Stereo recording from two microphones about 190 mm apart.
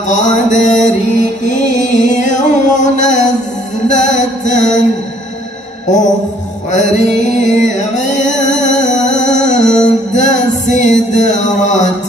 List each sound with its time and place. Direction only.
0.1 s mantra: 40° left (ahead or behind)
7.4 s mantra: 40° left (ahead or behind)
8.7 s music: 40° left (ahead or behind)